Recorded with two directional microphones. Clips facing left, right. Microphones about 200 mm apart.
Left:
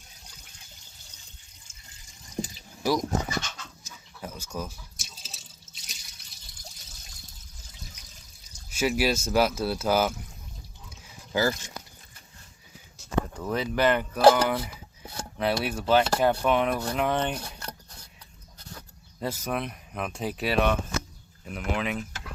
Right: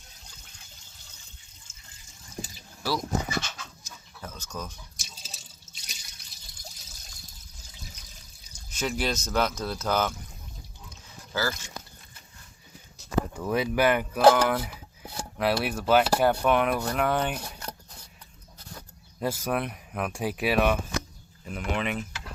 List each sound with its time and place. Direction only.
2.3 s water: 15° left (ahead or behind)
4.2 s a sound: 10° left (ahead or behind)
4.5 s water: 5° left (ahead or behind)
8.5 s speech: 5° left (ahead or behind)
11.3 s speech: 20° left (ahead or behind)
13.5 s speech: 10° right (ahead or behind)
14.2 s speech: 5° left (ahead or behind)
19.2 s speech: 10° right (ahead or behind)
21.4 s speech: centre (ahead or behind)